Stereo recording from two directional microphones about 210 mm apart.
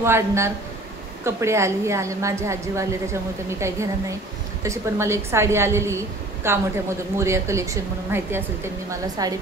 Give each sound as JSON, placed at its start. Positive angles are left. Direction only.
{"t": 0.0, "sound": "a woman's voice", "side_deg": -10}